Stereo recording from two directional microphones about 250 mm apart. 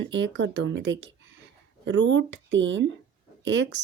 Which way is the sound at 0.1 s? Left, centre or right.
Right.